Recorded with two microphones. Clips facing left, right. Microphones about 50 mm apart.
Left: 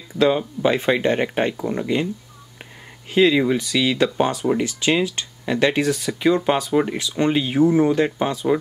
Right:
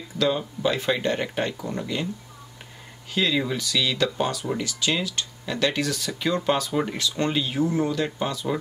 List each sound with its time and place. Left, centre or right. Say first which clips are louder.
0.2 s speech: left 6 dB; left
3.2 s speech: left 8 dB; left